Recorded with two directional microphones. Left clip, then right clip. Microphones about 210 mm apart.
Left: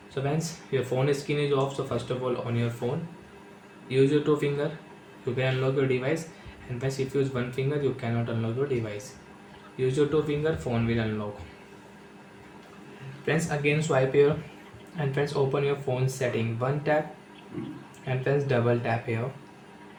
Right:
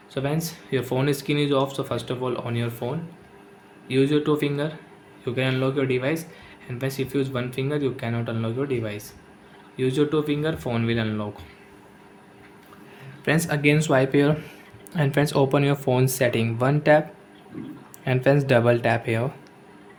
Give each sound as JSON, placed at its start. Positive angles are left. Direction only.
{"t": 0.1, "sound": "speech", "side_deg": -40}
{"t": 3.8, "sound": "speech", "side_deg": -40}
{"t": 9.7, "sound": "speech", "side_deg": -40}
{"t": 13.2, "sound": "speech", "side_deg": -50}
{"t": 18.0, "sound": "speech", "side_deg": -55}